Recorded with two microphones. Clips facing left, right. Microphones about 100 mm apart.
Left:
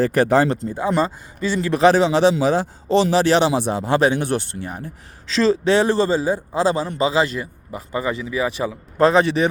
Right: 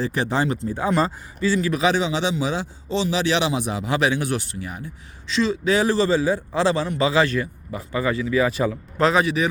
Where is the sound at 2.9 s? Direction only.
70° left (ahead or behind).